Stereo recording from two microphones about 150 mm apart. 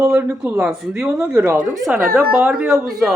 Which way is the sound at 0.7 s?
5° right (ahead or behind).